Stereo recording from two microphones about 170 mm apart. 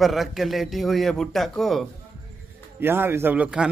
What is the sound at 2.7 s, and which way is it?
Speech, 15° right (ahead or behind).